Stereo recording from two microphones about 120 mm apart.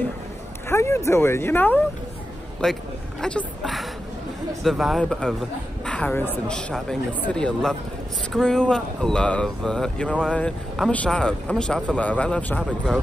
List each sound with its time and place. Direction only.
0.7 s speech: 20° left (ahead or behind)
2.6 s speech: 5° left (ahead or behind)